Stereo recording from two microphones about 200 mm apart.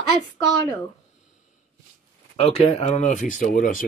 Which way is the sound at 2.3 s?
30° left (ahead or behind).